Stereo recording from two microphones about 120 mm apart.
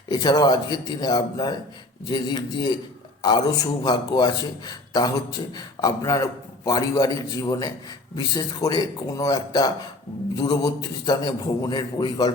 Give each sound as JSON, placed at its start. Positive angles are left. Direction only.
{"t": 0.1, "sound": "a man's voice", "side_deg": 35}